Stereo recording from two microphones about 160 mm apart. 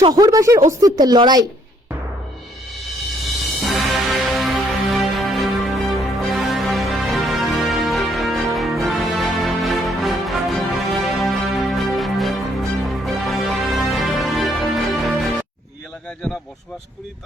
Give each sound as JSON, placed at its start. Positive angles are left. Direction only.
{"t": 0.1, "sound": "a woman's voice", "side_deg": -20}
{"t": 3.6, "sound": "music", "side_deg": 0}